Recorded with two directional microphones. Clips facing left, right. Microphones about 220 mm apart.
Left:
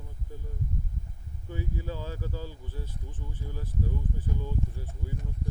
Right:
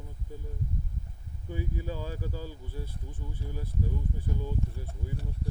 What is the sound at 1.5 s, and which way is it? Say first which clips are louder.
Speech: right 1 dB; 15° right (ahead or behind).